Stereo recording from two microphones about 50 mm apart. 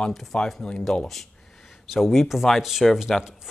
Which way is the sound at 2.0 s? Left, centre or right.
Centre.